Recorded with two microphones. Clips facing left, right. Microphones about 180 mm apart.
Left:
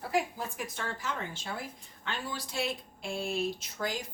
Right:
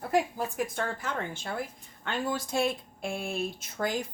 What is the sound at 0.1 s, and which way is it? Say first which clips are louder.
Speech: right 4 dB; 50° right (ahead or behind).